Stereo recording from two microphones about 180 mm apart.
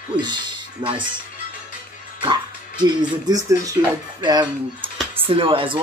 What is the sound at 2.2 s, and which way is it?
Music, 25° right (ahead or behind).